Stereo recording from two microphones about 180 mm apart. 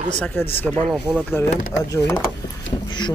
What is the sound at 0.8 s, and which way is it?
Speech, 5° right (ahead or behind).